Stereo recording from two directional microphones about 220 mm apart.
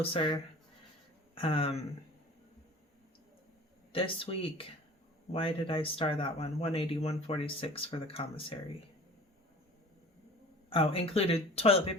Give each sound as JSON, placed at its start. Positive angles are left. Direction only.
{"t": 0.0, "sound": "speech", "side_deg": 25}
{"t": 1.4, "sound": "speech", "side_deg": 25}
{"t": 3.9, "sound": "speech", "side_deg": 25}
{"t": 10.7, "sound": "speech", "side_deg": 25}